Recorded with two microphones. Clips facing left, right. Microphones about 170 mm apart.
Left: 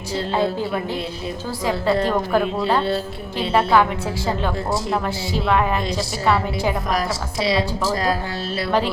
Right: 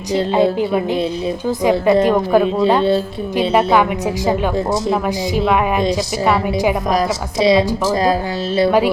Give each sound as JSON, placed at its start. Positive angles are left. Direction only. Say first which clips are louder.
{"t": 0.1, "sound": "a woman's voice", "louder": "right 7 dB", "side_deg": -20}